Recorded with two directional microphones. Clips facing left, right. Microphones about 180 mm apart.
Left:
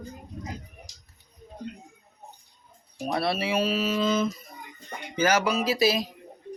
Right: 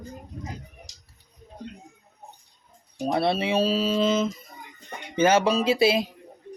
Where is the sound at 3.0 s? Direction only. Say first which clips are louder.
Right 3 dB; 25° right (ahead or behind).